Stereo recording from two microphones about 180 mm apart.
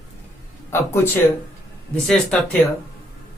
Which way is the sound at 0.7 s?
15° left (ahead or behind).